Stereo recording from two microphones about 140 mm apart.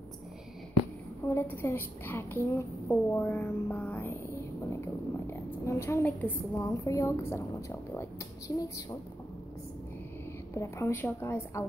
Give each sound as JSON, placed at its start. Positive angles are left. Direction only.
{"t": 1.3, "sound": "a woman's voice", "side_deg": 15}
{"t": 10.5, "sound": "a woman's voice", "side_deg": 20}